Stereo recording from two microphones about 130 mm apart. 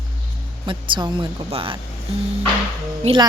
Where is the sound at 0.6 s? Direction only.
40° right (ahead or behind).